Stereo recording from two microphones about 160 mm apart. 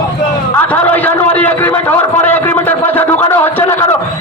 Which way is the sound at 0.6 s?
10° left (ahead or behind).